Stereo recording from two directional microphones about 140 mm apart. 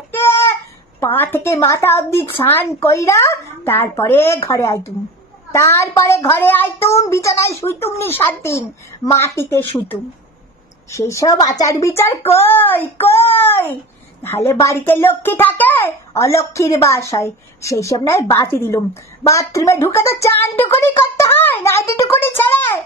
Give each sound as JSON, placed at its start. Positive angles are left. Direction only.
{"t": 0.1, "sound": "a sound", "side_deg": 15}
{"t": 1.0, "sound": "music", "side_deg": 15}
{"t": 4.5, "sound": "a child's voice", "side_deg": 20}
{"t": 8.0, "sound": "music", "side_deg": 15}
{"t": 10.9, "sound": "a child's voice", "side_deg": 20}
{"t": 12.4, "sound": "music", "side_deg": 15}
{"t": 14.2, "sound": "a child's voice", "side_deg": 20}
{"t": 19.2, "sound": "music", "side_deg": 20}